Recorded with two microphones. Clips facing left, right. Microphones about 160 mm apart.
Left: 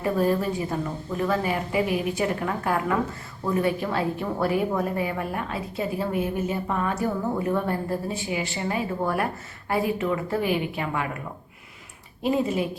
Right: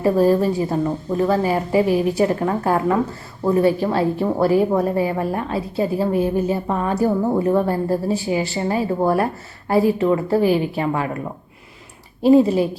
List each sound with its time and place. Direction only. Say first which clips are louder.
0.0 s a woman's voice: right 7 dB; 35° right (ahead or behind)
12.2 s a woman's voice: right 10 dB; 35° right (ahead or behind)